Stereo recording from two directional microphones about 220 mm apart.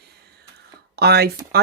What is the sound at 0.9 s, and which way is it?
Speech, 45° right (ahead or behind).